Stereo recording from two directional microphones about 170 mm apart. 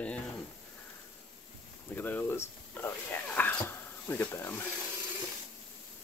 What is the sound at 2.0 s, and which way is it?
Speech, 10° left (ahead or behind).